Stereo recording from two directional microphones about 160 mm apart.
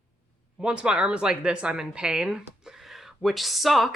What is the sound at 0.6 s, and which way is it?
Speech, 5° right (ahead or behind).